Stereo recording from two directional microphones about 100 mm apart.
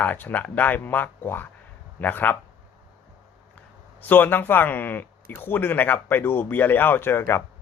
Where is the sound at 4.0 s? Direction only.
20° left (ahead or behind).